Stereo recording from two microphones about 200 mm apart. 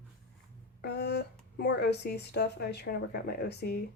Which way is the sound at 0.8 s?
55° left (ahead or behind).